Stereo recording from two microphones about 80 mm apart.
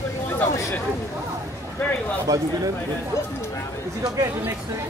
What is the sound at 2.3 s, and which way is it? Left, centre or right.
Speech, right.